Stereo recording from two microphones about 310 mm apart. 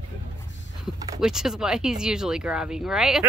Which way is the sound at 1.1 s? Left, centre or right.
Centre.